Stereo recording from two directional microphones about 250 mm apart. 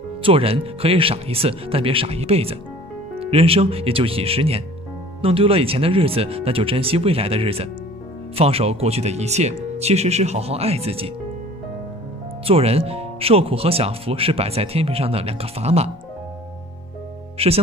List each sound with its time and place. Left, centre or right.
0.2 s speech: right
12.4 s speech: right
17.4 s speech: right